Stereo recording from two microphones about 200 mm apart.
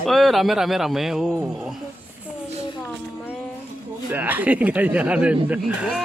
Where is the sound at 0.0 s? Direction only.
Centre (ahead or behind).